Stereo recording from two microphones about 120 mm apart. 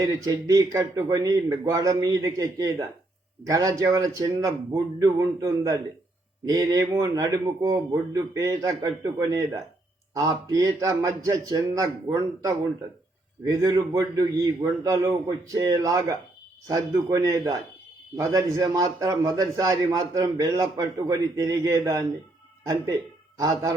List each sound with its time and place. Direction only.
0.0 s a man's voice: 30° right (ahead or behind)
23.4 s speech: 30° right (ahead or behind)